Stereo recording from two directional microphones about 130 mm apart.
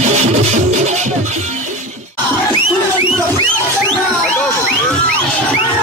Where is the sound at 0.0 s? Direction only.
60° right (ahead or behind).